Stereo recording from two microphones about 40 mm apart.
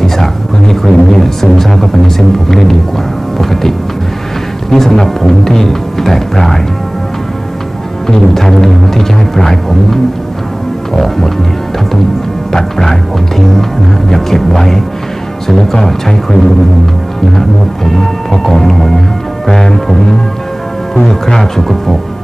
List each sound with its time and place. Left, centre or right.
0.0 s music: centre
3.3 s speech: centre
8.1 s speech: centre
11.0 s speech: centre
12.5 s speech: centre
17.8 s speech: centre